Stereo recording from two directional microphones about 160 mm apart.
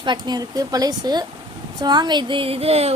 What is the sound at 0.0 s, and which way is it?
Speech, 25° right (ahead or behind).